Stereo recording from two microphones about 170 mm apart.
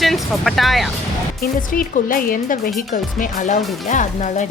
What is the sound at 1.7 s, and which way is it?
Speech, 55° left (ahead or behind).